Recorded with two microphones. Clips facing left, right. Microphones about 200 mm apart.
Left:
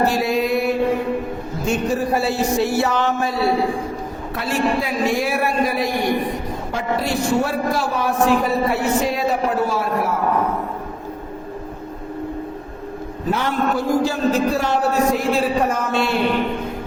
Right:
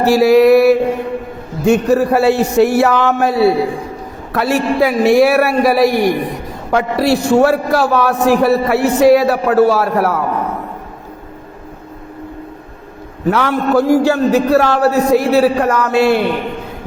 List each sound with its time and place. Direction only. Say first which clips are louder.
0.0 s mantra: right 10 dB; 80° right
1.6 s a man's voice: right 9 dB; 65° right (ahead or behind)
13.2 s a man's voice: right 6 dB; 75° right (ahead or behind)